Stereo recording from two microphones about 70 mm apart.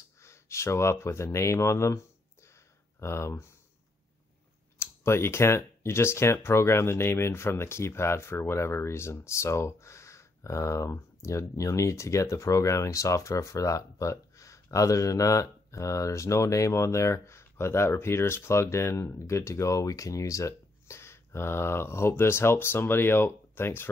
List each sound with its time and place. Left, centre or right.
0.2 s speech: left
3.0 s speech: left
4.7 s speech: left